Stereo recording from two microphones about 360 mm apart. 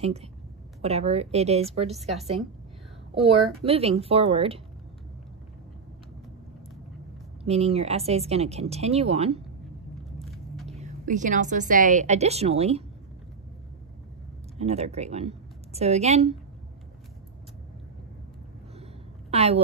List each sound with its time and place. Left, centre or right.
0.0 s speech: centre
3.6 s speech: centre
7.4 s speech: centre
10.1 s vehicle: centre
10.7 s a woman's voice: centre
14.6 s speech: centre
19.3 s a woman's voice: centre